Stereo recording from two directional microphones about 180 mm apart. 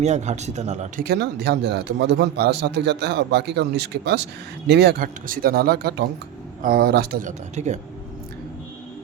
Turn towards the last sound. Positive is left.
turn(degrees=-40)  # may be behind; listen again after turning